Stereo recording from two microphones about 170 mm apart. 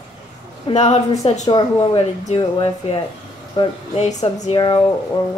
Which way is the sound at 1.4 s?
25° left (ahead or behind).